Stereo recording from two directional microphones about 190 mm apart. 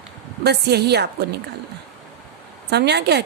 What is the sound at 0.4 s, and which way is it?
Speech, 60° right (ahead or behind).